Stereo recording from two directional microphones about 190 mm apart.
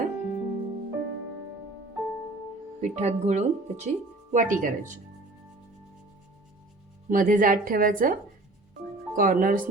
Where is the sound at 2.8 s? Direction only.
35° right (ahead or behind).